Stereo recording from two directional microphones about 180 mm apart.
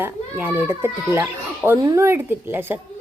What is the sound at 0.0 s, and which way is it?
Speech, 10° right (ahead or behind).